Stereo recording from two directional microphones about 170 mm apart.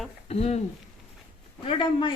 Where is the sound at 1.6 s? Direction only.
30° left (ahead or behind).